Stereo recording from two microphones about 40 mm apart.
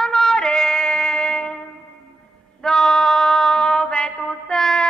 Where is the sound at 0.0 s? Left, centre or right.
Centre.